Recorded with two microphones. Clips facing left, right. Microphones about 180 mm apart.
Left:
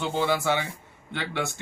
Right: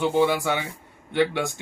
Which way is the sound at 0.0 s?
15° right (ahead or behind).